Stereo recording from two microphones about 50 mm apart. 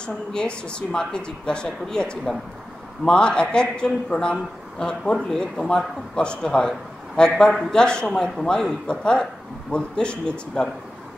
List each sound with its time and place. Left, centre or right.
0.0 s a man's voice: centre